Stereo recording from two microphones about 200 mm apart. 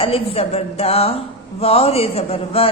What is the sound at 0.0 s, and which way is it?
A woman's voice, 30° left (ahead or behind).